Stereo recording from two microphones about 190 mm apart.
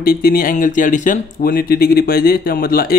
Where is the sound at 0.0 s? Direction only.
50° left (ahead or behind).